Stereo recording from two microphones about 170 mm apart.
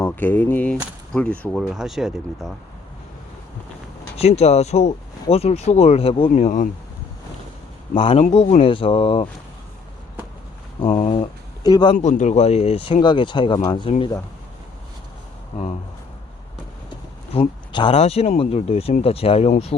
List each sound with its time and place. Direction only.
0.0 s speech: 10° left (ahead or behind)
4.2 s speech: 40° left (ahead or behind)
6.3 s speech: 45° left (ahead or behind)
7.9 s speech: 35° left (ahead or behind)
10.8 s speech: 35° left (ahead or behind)
11.6 s speech: 25° left (ahead or behind)
12.0 s speech: 45° left (ahead or behind); by 13.9 s 25° left (ahead or behind)
17.3 s speech: 30° left (ahead or behind)